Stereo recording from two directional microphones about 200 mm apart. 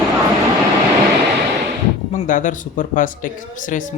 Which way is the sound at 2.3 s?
40° left (ahead or behind).